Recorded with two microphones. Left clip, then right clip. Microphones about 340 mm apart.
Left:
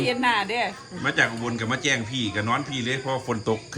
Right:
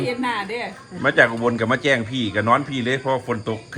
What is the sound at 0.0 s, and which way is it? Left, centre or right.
Speech, centre.